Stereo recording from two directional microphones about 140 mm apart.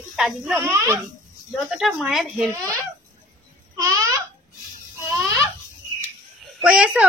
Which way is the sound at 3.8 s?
20° right (ahead or behind).